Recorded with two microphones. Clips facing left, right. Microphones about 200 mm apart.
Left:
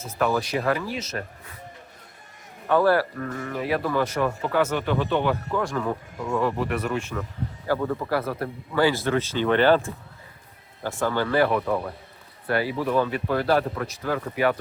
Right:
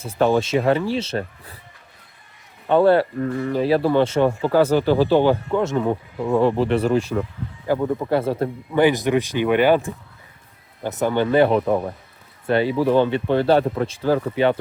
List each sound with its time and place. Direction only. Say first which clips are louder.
0.0 s speech: right 6 dB; 30° right (ahead or behind)
2.6 s speech: right 5 dB; 25° right (ahead or behind)
7.7 s speech: right 5 dB; 20° right (ahead or behind)
11.6 s speech: right 5 dB; 35° right (ahead or behind)
12.5 s speech: right 6 dB; 25° right (ahead or behind)